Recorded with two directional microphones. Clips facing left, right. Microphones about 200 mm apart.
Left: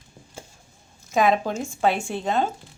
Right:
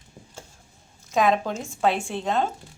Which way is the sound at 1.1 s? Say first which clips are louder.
Left 1 dB; 5° left (ahead or behind).